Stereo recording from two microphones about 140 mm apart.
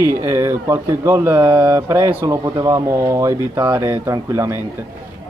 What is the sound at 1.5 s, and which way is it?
Speech, 30° right (ahead or behind).